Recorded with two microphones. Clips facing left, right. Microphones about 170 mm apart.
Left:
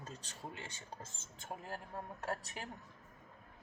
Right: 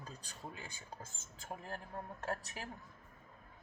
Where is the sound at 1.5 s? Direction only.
25° left (ahead or behind).